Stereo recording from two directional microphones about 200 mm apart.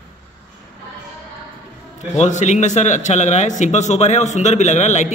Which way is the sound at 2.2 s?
35° left (ahead or behind).